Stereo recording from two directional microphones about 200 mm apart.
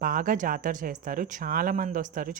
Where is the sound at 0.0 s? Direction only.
45° right (ahead or behind).